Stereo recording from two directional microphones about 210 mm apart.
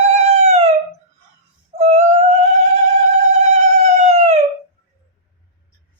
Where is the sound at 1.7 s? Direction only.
30° right (ahead or behind).